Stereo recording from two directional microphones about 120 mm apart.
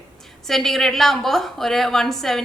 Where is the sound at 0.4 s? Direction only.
5° left (ahead or behind).